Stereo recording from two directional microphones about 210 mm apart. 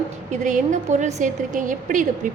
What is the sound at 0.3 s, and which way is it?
A woman's voice, 35° right (ahead or behind).